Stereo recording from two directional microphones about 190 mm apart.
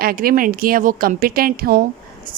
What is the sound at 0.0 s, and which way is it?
Speech, 50° right (ahead or behind).